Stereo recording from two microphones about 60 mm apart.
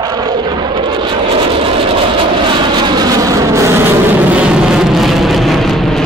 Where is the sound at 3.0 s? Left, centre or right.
Right.